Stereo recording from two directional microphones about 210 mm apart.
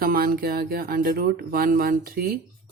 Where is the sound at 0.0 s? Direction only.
45° right (ahead or behind).